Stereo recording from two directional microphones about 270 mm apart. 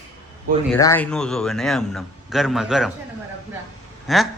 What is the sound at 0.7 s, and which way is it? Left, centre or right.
A man's voice, centre.